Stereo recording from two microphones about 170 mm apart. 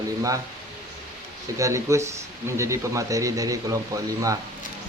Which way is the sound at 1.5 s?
20° right (ahead or behind).